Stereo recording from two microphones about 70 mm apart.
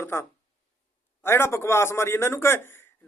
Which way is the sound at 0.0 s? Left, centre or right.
Left.